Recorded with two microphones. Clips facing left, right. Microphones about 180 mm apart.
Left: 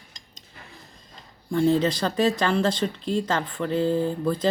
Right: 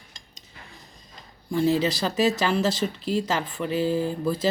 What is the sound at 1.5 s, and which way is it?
Speech, 5° right (ahead or behind).